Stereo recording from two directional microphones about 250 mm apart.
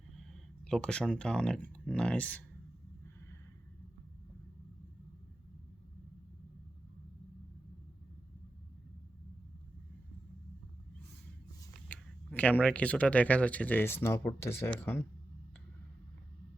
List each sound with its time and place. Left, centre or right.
0.2 s speech: centre
11.9 s speech: centre